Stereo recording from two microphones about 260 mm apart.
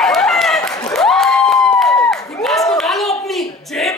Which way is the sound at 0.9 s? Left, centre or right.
Centre.